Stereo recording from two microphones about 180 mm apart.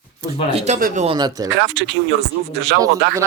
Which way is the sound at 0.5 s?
40° right (ahead or behind).